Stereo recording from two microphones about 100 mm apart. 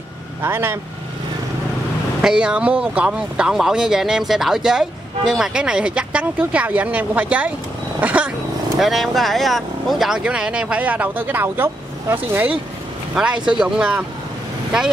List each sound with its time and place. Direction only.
0.4 s speech: 25° right (ahead or behind)
2.2 s speech: 10° right (ahead or behind)
8.0 s roaring cats: 15° right (ahead or behind)
8.7 s speech: centre (ahead or behind); by 12.5 s 20° right (ahead or behind)
13.1 s speech: 10° right (ahead or behind)